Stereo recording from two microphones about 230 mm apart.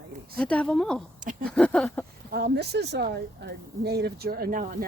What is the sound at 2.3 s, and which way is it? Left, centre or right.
Speech, right.